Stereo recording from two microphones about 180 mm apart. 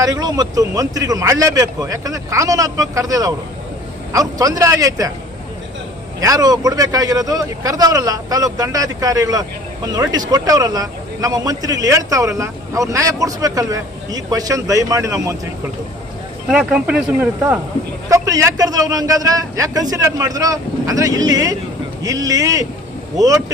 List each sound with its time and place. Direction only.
0.0 s a man's voice: 20° right (ahead or behind)
6.1 s a man's voice: 20° right (ahead or behind)
16.5 s a man's voice: 5° right (ahead or behind)